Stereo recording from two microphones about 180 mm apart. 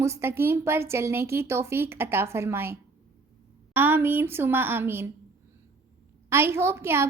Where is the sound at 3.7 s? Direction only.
10° right (ahead or behind).